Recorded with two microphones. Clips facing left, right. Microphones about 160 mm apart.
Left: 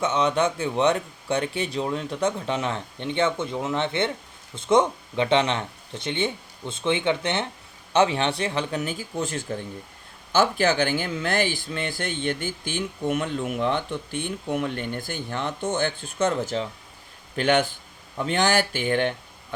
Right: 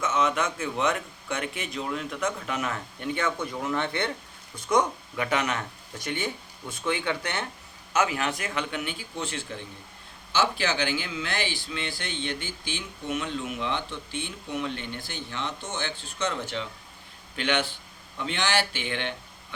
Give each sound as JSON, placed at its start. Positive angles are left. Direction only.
{"t": 0.0, "sound": "a man's voice", "side_deg": 30}